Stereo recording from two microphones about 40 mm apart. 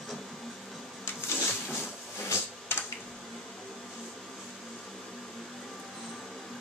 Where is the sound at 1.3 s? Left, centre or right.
Left.